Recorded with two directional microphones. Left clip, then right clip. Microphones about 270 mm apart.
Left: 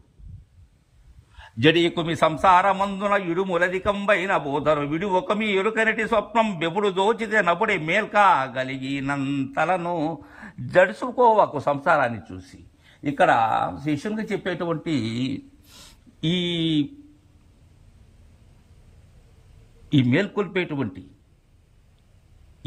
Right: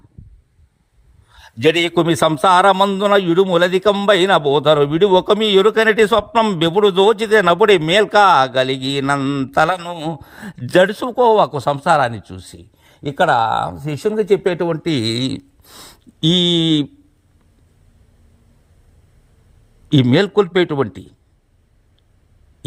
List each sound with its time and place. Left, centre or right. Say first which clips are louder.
1.4 s a man's voice: right 4 dB; centre
15.6 s a sound: right 8 dB; centre
19.9 s a man's voice: right 7 dB; centre